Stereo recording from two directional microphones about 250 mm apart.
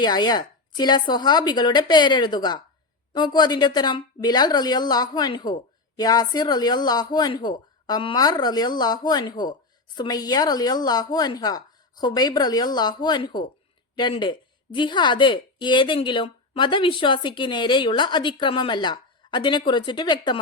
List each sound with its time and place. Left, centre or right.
0.0 s a woman's voice: centre